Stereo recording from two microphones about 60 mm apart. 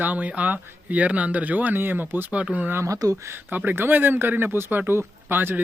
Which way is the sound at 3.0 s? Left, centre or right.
Right.